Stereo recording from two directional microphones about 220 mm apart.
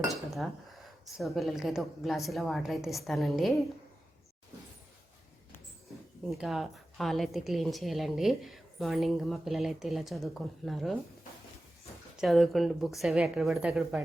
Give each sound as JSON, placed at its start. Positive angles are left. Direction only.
{"t": 0.1, "sound": "a woman's voice", "side_deg": 0}
{"t": 6.2, "sound": "a woman's voice", "side_deg": 0}
{"t": 12.1, "sound": "a woman's voice", "side_deg": 0}